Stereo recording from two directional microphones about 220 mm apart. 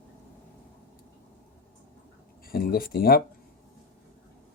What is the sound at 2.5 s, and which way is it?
Speech, 40° left (ahead or behind).